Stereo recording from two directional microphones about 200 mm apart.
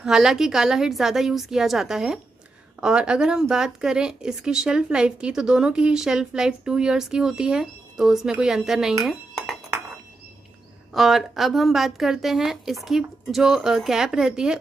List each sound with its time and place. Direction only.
0.0 s speech: centre (ahead or behind)
10.9 s speech: centre (ahead or behind)